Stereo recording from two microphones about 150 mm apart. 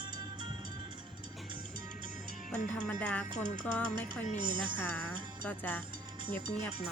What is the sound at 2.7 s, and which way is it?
Music, 10° left (ahead or behind).